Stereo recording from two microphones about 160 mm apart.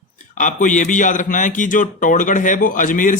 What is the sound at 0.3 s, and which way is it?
A man's voice, 50° left (ahead or behind).